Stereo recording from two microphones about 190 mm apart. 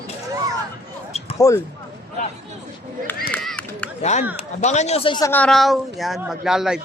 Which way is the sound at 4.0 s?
35° left (ahead or behind).